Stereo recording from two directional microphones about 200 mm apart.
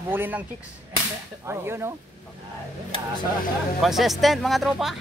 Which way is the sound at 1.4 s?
10° right (ahead or behind).